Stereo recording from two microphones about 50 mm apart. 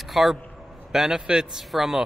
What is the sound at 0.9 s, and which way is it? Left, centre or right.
Speech, centre.